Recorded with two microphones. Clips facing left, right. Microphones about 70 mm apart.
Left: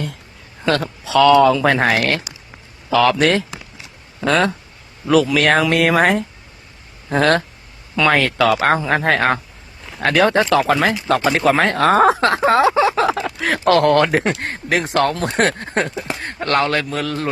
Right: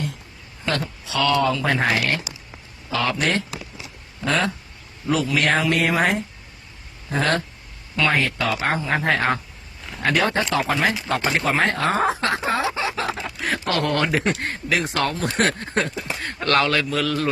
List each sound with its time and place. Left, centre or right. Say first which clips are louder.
1.6 s speech: left 5 dB; left
3.0 s speech: left 8 dB; left
4.2 s speech: left 6 dB; left
5.0 s speech: left 6 dB; left
8.1 s speech: left 7 dB; left
10.0 s speech: left 6 dB; left
12.4 s speech: left 10 dB; left
13.7 s a man's voice: left 8 dB; left